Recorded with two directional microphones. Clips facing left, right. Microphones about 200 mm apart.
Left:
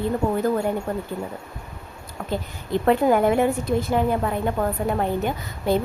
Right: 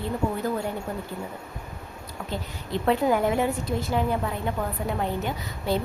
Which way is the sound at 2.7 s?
55° left (ahead or behind).